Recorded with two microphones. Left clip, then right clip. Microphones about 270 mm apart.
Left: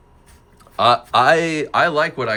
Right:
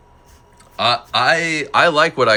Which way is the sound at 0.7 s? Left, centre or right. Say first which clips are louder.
Left 2 dB; centre.